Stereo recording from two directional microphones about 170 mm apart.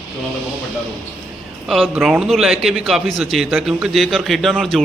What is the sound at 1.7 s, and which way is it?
A man's voice, centre (ahead or behind).